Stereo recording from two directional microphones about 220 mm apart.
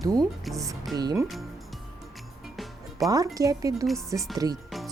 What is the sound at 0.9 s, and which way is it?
Speech, 15° right (ahead or behind).